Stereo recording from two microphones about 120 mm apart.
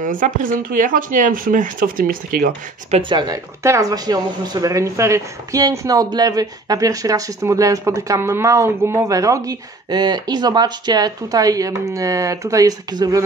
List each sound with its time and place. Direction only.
0.0 s speech: 90° right
3.0 s speech: 40° right (ahead or behind)
3.6 s speech: 25° right (ahead or behind)